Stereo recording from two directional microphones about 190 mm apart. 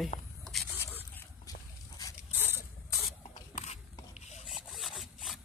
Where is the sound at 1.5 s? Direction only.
20° left (ahead or behind).